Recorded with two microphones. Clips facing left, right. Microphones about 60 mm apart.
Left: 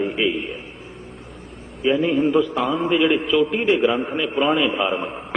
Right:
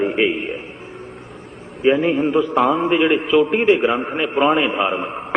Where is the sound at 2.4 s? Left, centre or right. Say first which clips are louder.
Right 4 dB; right.